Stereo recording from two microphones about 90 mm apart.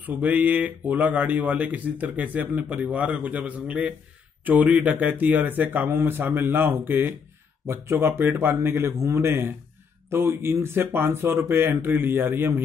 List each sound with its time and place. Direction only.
0.0 s speech: 20° right (ahead or behind)